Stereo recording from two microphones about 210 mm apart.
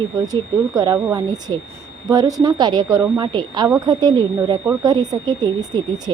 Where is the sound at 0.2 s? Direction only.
20° right (ahead or behind).